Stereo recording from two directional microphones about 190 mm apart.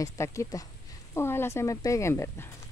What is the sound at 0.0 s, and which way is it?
Speech, 15° left (ahead or behind).